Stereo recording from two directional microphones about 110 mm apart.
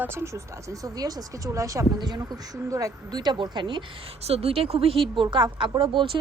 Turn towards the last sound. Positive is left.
turn(degrees=-50)  # may be behind; listen again after turning